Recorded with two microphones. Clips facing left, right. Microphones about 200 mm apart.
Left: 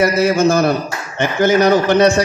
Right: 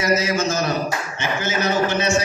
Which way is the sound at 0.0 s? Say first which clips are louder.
Left 7 dB; 55° left (ahead or behind).